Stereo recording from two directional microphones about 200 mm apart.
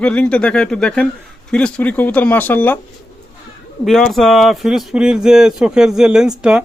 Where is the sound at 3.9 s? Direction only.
Centre (ahead or behind).